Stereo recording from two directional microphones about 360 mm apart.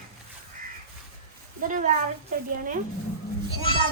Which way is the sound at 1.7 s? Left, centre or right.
Right.